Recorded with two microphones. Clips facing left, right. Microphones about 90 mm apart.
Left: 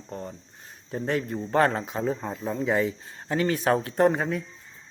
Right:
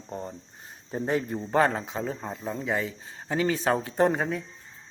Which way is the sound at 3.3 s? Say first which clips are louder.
Left 2 dB; 5° right (ahead or behind).